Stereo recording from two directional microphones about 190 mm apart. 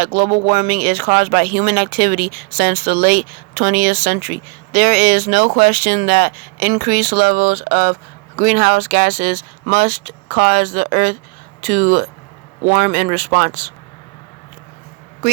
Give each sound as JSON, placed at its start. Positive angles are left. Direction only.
{"t": 0.0, "sound": "speech", "side_deg": -45}
{"t": 15.2, "sound": "speech", "side_deg": -40}